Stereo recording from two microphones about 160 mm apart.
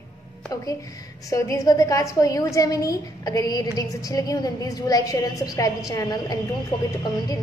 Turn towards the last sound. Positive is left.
turn(degrees=25)  # may be behind; listen again after turning